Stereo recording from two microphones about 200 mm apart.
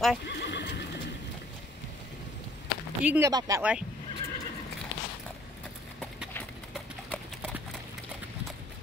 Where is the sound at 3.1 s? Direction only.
15° right (ahead or behind).